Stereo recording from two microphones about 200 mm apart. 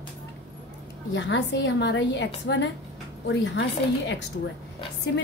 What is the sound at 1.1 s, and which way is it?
A woman's voice, 65° left (ahead or behind).